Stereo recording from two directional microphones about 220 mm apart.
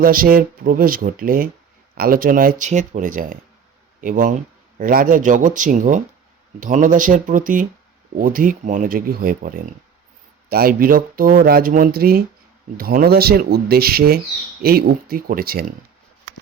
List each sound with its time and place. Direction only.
0.0 s speech: 40° right (ahead or behind)